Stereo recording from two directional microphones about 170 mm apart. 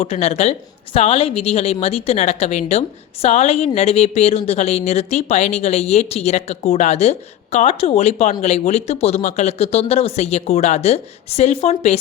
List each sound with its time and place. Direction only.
0.0 s speech: 40° left (ahead or behind)